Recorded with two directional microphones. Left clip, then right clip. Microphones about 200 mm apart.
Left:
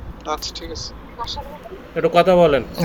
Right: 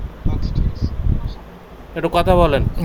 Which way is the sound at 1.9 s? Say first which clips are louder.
Left 2 dB; 35° right (ahead or behind).